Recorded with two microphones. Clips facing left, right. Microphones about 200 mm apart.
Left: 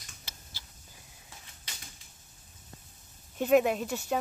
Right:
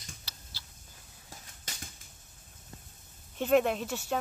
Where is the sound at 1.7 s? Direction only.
45° right (ahead or behind).